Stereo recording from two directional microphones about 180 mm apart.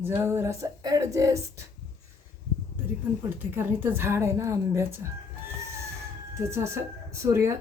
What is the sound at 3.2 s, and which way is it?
Speech, 10° right (ahead or behind).